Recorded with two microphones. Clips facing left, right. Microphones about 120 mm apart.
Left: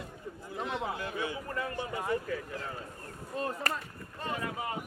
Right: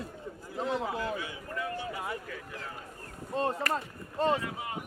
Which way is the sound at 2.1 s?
5° right (ahead or behind).